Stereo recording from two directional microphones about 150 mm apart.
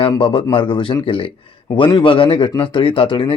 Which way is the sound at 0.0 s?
35° left (ahead or behind).